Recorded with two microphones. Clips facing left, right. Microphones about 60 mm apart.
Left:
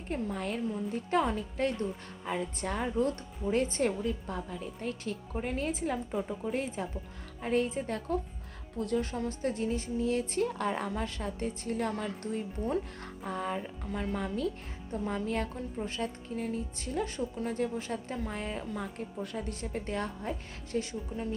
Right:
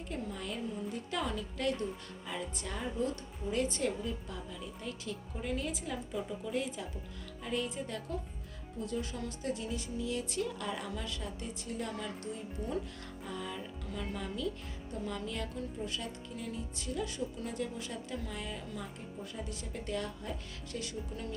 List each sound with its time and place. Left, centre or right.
0.1 s a woman's voice: left
3.5 s a woman's voice: left